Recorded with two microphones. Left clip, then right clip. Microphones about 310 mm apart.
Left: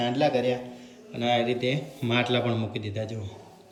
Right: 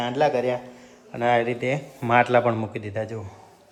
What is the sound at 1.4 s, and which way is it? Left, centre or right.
Speech, right.